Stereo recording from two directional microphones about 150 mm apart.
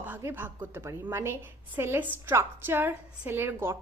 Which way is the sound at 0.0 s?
15° right (ahead or behind).